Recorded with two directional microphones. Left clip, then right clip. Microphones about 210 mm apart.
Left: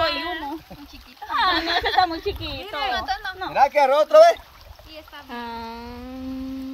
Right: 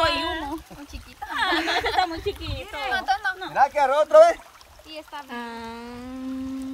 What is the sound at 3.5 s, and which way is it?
Speech, 45° left (ahead or behind).